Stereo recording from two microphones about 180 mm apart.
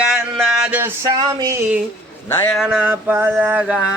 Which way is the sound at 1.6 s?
5° right (ahead or behind).